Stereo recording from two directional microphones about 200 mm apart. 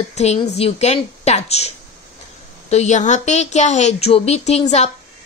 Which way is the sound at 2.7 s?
35° left (ahead or behind).